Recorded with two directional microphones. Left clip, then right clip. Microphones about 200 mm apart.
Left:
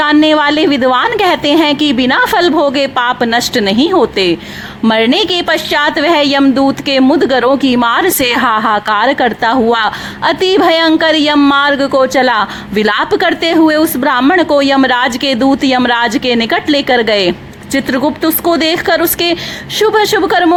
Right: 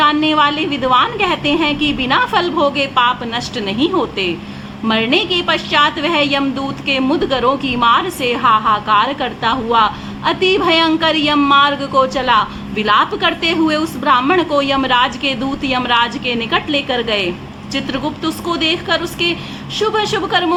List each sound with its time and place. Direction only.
0.0 s a woman's voice: 50° left (ahead or behind)